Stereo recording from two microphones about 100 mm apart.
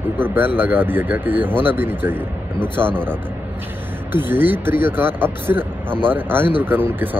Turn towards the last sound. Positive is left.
turn(degrees=-20)  # may be behind; listen again after turning